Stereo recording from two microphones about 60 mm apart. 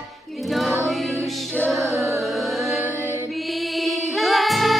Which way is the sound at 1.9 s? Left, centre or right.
Right.